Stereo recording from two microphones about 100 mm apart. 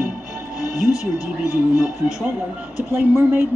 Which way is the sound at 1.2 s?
15° right (ahead or behind).